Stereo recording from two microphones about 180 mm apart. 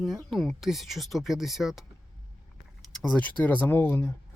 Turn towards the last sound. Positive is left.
turn(degrees=10)  # may be behind; listen again after turning